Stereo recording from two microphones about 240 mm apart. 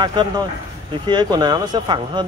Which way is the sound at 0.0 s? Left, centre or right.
Centre.